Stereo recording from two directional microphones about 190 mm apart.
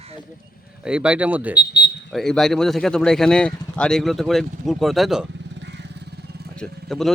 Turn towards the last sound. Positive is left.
turn(degrees=0)  # may be behind; listen again after turning